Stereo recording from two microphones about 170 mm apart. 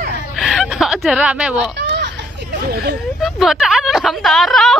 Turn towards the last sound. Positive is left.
turn(degrees=0)  # may be behind; listen again after turning